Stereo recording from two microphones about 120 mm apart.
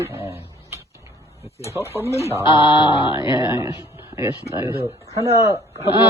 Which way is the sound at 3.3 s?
40° left (ahead or behind).